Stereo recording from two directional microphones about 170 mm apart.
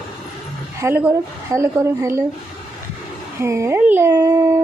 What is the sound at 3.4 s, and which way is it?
Speech, 15° right (ahead or behind).